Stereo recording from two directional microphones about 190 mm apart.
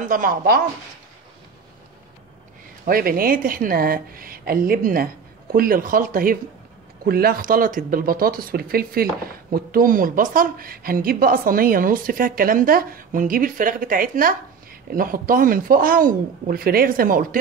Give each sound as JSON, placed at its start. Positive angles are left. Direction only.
{"t": 0.1, "sound": "speech", "side_deg": -45}
{"t": 2.8, "sound": "speech", "side_deg": -50}